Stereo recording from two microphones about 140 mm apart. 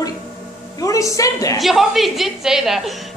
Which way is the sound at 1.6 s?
Centre (ahead or behind).